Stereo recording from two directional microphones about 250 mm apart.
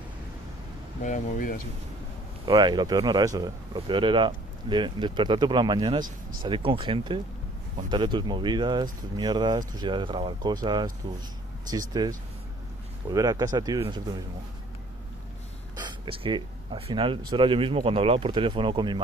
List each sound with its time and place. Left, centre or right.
1.0 s speech: left
2.4 s speech: centre
15.7 s speech: centre